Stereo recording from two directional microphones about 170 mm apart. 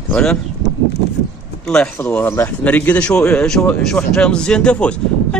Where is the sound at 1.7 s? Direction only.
5° left (ahead or behind).